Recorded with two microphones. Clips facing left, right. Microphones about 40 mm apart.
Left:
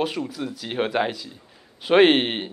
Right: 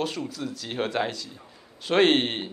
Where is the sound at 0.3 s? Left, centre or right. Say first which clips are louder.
Left 3 dB; centre.